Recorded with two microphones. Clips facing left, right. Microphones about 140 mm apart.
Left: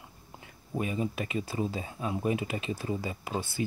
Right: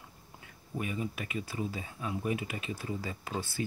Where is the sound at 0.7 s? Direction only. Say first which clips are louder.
Left 4 dB; 30° left (ahead or behind).